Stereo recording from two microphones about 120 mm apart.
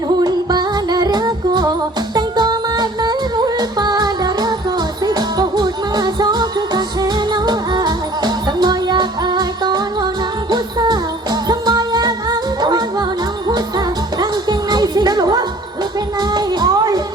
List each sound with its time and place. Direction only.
0.2 s music: 35° right (ahead or behind)